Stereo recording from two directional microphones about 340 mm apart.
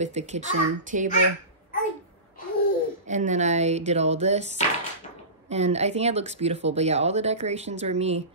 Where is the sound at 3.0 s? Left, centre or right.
Right.